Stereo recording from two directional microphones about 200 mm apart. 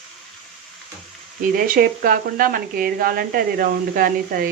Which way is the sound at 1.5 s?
45° right (ahead or behind).